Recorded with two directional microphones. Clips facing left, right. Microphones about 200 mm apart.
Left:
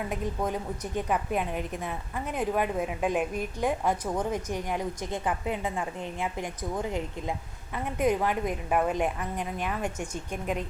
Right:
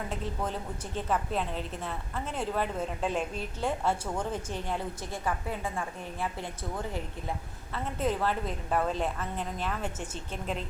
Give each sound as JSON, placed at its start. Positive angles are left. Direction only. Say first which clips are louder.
{"t": 0.1, "sound": "a woman's voice", "louder": "left 4 dB", "side_deg": 15}